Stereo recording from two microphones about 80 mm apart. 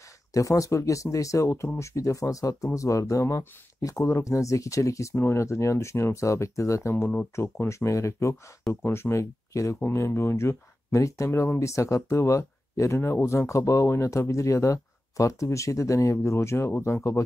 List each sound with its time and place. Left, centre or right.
0.3 s speech: left
7.0 s speech: left
7.3 s speech: left
11.2 s speech: left